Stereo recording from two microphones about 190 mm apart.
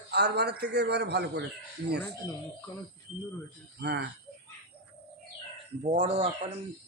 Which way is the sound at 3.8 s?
65° right (ahead or behind).